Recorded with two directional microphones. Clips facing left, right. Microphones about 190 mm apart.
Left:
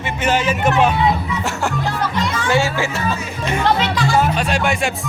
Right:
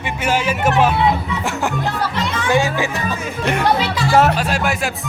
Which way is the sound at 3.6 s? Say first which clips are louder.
Left 2 dB; 5° right (ahead or behind).